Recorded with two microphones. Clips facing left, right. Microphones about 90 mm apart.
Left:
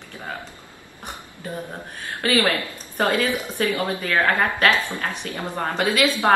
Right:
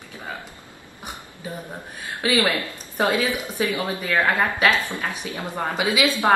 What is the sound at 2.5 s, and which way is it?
A woman's voice, 5° right (ahead or behind).